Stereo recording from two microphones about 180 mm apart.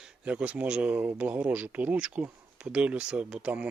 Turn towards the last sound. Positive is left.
turn(degrees=-5)  # may be behind; listen again after turning